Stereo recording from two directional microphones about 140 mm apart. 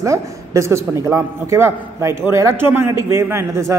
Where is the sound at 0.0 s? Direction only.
20° right (ahead or behind).